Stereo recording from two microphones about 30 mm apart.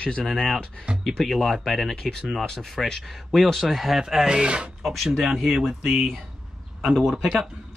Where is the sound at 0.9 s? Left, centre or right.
Right.